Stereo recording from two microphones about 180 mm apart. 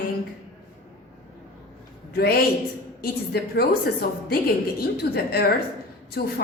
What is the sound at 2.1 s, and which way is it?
A woman's voice, 60° left (ahead or behind).